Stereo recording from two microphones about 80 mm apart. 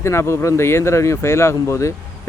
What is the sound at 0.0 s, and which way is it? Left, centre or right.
Speech, left.